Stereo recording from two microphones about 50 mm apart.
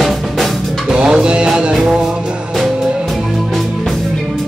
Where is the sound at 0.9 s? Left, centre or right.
Centre.